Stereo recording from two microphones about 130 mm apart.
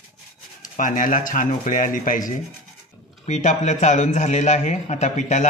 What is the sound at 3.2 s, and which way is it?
A man's voice, 70° left (ahead or behind).